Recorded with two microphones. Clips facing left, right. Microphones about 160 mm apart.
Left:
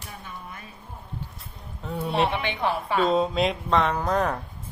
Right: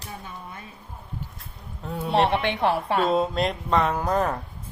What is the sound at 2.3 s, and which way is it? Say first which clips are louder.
Speech: right 4 dB; 65° right (ahead or behind).